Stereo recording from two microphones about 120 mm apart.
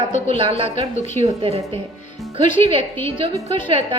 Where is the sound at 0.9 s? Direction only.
90° left.